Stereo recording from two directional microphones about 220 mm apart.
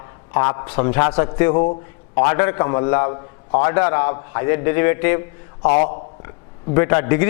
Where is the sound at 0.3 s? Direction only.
15° left (ahead or behind).